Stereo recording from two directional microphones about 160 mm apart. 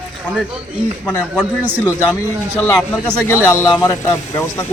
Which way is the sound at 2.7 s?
5° left (ahead or behind).